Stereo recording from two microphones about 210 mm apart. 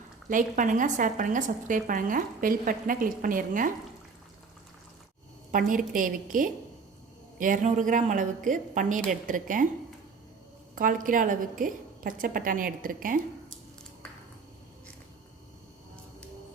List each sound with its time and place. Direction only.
0.3 s a woman's voice: 40° right (ahead or behind)
5.5 s a woman's voice: 40° right (ahead or behind)
10.8 s a woman's voice: 40° right (ahead or behind)